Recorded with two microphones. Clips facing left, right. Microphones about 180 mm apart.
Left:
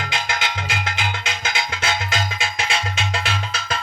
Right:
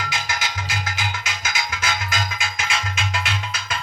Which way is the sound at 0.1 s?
60° left (ahead or behind).